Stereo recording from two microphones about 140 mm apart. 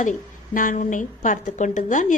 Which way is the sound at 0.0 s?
65° left (ahead or behind).